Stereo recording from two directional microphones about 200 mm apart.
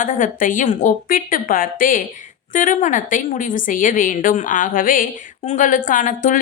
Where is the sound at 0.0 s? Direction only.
40° left (ahead or behind).